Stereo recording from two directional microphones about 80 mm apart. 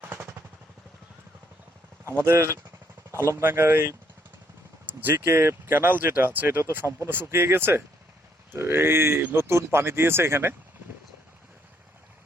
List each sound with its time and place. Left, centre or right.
0.0 s vehicle: right
2.0 s speech: right